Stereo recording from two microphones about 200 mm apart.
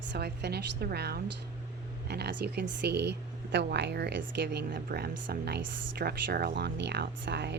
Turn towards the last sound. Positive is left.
turn(degrees=-60)  # may be behind; listen again after turning